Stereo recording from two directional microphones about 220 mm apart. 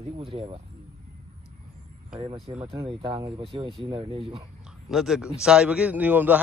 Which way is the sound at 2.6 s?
25° right (ahead or behind).